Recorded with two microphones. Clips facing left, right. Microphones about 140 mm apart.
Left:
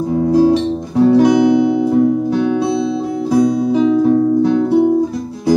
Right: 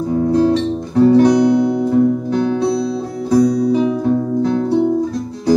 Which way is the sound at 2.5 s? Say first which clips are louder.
Left 1 dB; 5° left (ahead or behind).